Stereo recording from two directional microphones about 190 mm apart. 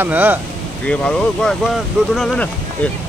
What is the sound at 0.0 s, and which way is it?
Speech, 10° right (ahead or behind).